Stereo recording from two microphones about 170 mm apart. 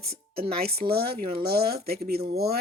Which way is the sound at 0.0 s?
65° right (ahead or behind).